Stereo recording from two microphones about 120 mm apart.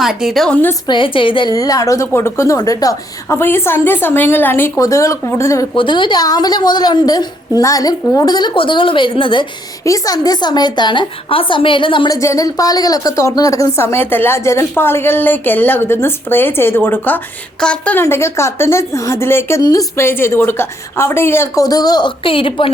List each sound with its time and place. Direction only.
0.0 s a woman's voice: 5° right (ahead or behind)
0.9 s a woman's voice: 45° left (ahead or behind)
1.5 s a woman's voice: 30° left (ahead or behind)
5.7 s a woman's voice: 45° left (ahead or behind)
9.8 s a woman's voice: 30° left (ahead or behind)
12.0 s a woman's voice: 25° left (ahead or behind); by 18.0 s 10° left (ahead or behind)
18.0 s a woman's voice: 25° left (ahead or behind); by 22.7 s 45° left (ahead or behind)